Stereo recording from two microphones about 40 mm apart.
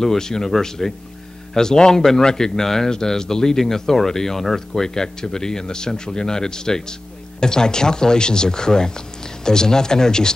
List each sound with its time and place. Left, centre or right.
0.0 s speech: centre